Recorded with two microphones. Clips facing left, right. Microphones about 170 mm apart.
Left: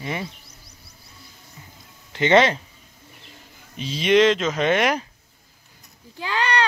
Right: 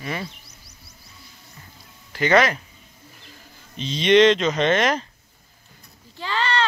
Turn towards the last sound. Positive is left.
turn(degrees=10)  # may be behind; listen again after turning